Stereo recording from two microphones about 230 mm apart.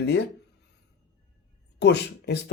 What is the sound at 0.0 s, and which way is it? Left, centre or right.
Speech, left.